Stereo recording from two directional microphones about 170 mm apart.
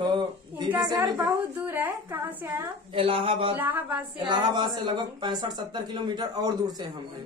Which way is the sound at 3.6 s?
10° right (ahead or behind).